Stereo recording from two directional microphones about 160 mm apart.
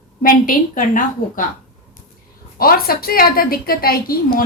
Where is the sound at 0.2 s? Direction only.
60° left (ahead or behind).